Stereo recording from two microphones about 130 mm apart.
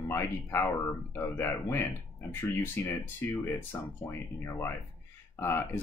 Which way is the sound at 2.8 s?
20° left (ahead or behind).